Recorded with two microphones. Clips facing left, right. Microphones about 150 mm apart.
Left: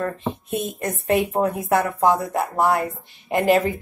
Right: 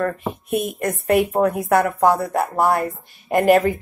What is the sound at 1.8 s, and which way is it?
Speech, 45° right (ahead or behind).